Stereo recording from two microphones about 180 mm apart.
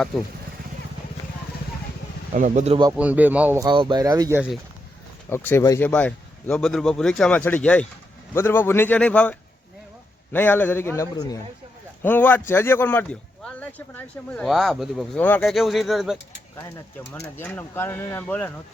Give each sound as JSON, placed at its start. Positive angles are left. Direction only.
{"t": 2.3, "sound": "speech", "side_deg": -40}
{"t": 2.9, "sound": "speech", "side_deg": -10}
{"t": 3.6, "sound": "speech", "side_deg": -25}
{"t": 5.3, "sound": "a man's voice", "side_deg": 10}
{"t": 17.1, "sound": "a man's voice", "side_deg": 10}